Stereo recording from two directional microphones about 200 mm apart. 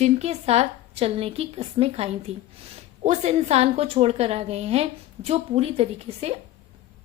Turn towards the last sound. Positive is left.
turn(degrees=-30)  # may be behind; listen again after turning